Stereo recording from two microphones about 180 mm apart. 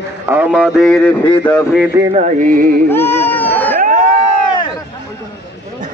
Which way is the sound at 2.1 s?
45° right (ahead or behind).